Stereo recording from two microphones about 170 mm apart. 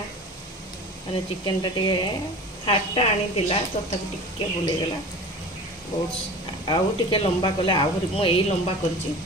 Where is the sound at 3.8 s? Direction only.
45° left (ahead or behind).